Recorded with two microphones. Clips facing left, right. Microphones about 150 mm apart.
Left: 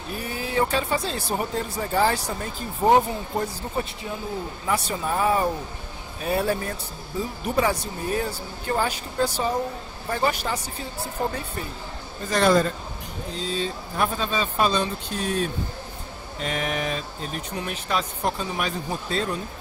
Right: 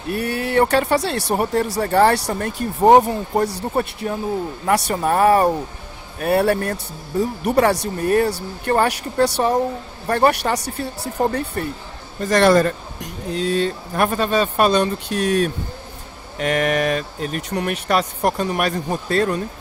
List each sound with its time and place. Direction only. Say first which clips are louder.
0.1 s speech: right 8 dB; 65° right (ahead or behind)
12.2 s speech: right 5 dB; 75° right (ahead or behind)